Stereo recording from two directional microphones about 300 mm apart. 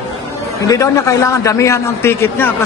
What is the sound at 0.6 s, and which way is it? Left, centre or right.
A man's voice, centre.